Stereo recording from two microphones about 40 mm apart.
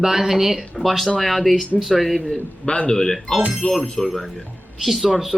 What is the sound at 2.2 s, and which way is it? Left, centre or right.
Speech, centre.